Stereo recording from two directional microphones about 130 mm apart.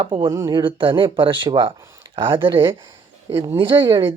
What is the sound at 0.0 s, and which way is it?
Speech, 40° right (ahead or behind).